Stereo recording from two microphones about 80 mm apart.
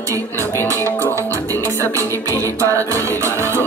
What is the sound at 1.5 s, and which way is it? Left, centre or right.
Music, right.